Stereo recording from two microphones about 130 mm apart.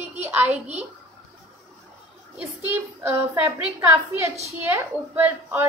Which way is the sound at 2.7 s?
20° right (ahead or behind).